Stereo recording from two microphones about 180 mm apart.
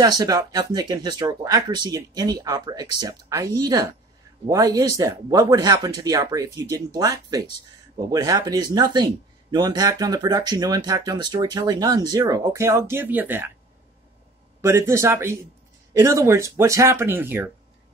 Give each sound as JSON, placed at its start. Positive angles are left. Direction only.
{"t": 0.0, "sound": "speech", "side_deg": -20}
{"t": 14.6, "sound": "speech", "side_deg": -15}